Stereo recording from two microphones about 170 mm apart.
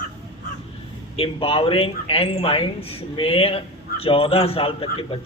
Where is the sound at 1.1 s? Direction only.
35° left (ahead or behind).